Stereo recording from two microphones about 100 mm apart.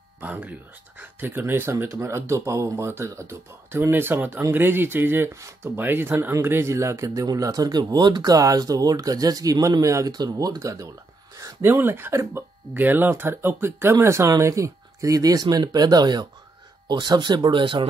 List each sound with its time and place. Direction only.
0.2 s speech: 15° right (ahead or behind); by 17.8 s 55° right (ahead or behind)